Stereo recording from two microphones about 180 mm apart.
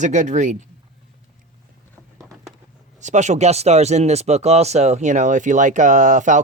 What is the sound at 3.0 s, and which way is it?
Speech, 40° right (ahead or behind).